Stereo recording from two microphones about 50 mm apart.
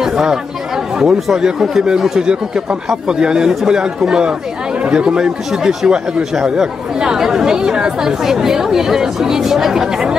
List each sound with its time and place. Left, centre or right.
0.0 s chatter: centre
0.9 s speech: centre